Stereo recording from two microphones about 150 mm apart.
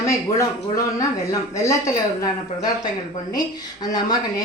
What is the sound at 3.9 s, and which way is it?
Speech, 25° left (ahead or behind).